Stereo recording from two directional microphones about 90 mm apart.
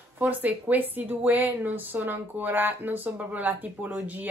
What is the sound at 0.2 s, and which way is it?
A woman's voice, 20° right (ahead or behind).